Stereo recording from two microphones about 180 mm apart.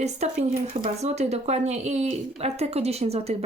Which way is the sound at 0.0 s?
40° right (ahead or behind).